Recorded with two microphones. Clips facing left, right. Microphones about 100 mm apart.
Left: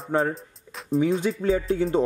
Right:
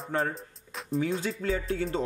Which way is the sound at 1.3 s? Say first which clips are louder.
Left 7 dB; 30° left (ahead or behind).